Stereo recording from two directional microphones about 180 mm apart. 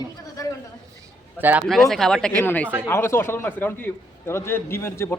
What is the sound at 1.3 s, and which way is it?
Speech, 10° right (ahead or behind).